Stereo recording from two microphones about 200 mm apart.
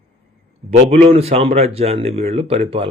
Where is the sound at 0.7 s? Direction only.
35° right (ahead or behind).